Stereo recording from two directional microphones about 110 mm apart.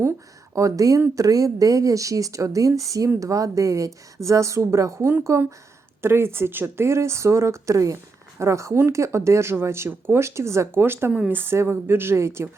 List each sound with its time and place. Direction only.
0.5 s speech: 30° right (ahead or behind)